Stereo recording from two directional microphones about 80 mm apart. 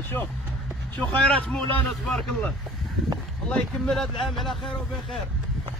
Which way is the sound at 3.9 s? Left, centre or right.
Centre.